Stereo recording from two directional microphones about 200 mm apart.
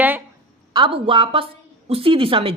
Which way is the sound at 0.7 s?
25° right (ahead or behind).